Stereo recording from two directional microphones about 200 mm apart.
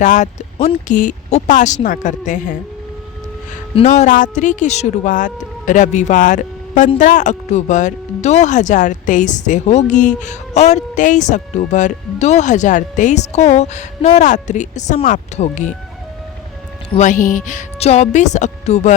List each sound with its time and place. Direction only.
0.0 s speech: 35° left (ahead or behind)
3.8 s speech: 35° left (ahead or behind)
17.0 s speech: 40° left (ahead or behind)